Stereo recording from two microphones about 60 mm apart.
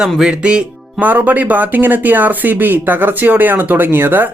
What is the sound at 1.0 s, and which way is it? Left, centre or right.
Speech, right.